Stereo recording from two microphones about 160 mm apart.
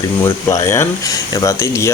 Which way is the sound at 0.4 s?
20° left (ahead or behind).